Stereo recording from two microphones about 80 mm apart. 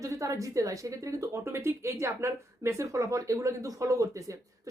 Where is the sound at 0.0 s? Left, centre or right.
Right.